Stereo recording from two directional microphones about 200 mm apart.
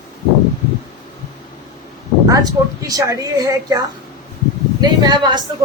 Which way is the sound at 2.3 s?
15° right (ahead or behind).